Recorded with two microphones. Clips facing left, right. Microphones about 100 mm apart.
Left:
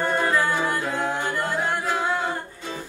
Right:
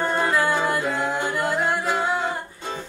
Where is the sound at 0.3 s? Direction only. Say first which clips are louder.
Right 1 dB; 5° right (ahead or behind).